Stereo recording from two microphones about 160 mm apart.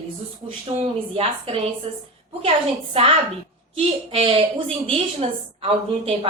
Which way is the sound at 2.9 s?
35° right (ahead or behind).